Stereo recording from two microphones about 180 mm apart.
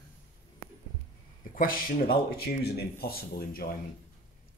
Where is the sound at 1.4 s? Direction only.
50° left (ahead or behind).